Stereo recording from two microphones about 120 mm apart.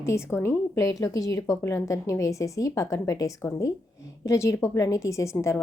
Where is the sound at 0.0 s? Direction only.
25° left (ahead or behind).